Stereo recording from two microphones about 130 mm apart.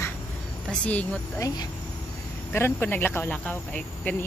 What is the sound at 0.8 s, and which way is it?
Speech, 10° left (ahead or behind).